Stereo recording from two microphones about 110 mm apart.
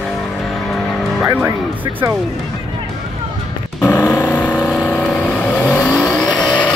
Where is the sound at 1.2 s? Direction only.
20° right (ahead or behind).